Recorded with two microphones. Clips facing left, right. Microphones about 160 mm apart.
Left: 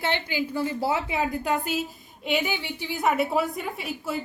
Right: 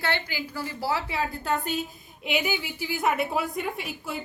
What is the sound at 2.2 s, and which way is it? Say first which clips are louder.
A woman's voice: left 1 dB; 5° right (ahead or behind).